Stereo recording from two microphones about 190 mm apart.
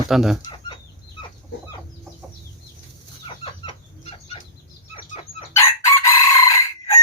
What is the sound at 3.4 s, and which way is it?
Chicken, 30° left (ahead or behind).